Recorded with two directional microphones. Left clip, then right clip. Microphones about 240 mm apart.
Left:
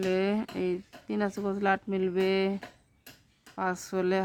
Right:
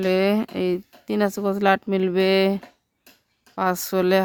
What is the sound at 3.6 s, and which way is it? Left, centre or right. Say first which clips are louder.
Speech: right 9 dB; right.